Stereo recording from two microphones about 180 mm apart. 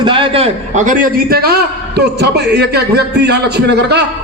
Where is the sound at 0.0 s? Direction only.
30° right (ahead or behind).